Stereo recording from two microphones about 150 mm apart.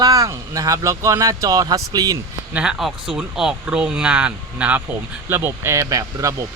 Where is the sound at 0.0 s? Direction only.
25° right (ahead or behind).